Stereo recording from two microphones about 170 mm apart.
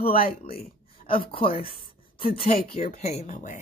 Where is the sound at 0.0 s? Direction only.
60° left (ahead or behind).